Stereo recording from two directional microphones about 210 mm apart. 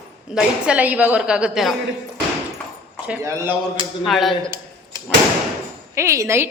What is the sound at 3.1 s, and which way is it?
Speech, 10° right (ahead or behind).